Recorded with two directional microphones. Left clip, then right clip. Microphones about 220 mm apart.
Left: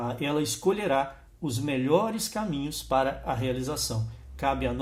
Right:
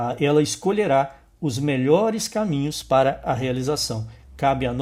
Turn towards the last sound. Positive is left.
turn(degrees=-45)  # may be behind; listen again after turning